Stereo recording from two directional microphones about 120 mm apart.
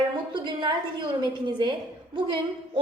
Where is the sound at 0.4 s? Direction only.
40° right (ahead or behind).